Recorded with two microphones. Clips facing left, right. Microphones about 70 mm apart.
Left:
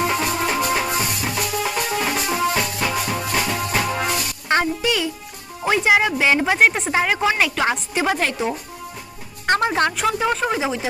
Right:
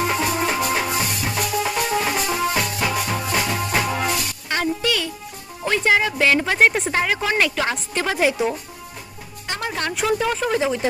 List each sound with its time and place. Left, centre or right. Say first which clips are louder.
0.0 s music: even; centre
4.6 s music: left 1 dB; centre
5.6 s a sound: left 2 dB; centre
6.6 s speech: even; centre
8.1 s speech: right 2 dB; centre
9.6 s speech: left 5 dB; left
10.2 s speech: left 1 dB; centre
10.5 s speech: right 2 dB; centre